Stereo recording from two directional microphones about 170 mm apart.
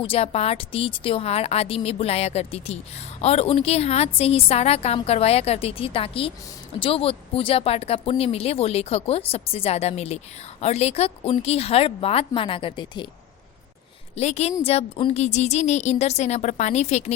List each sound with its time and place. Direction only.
0.0 s speech: 35° left (ahead or behind)
14.2 s speech: 40° left (ahead or behind)